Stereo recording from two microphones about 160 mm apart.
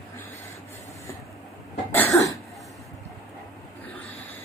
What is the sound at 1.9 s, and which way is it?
Cough, 15° left (ahead or behind).